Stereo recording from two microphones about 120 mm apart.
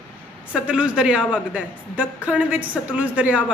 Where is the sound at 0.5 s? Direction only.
10° right (ahead or behind).